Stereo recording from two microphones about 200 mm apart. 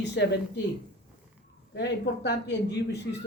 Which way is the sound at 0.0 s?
60° left (ahead or behind).